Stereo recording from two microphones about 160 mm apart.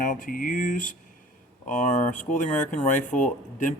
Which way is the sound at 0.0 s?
55° left (ahead or behind).